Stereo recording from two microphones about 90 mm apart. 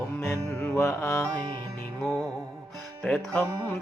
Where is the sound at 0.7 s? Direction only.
30° left (ahead or behind).